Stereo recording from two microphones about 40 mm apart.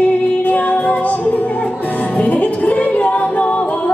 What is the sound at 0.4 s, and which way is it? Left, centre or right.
Music, left.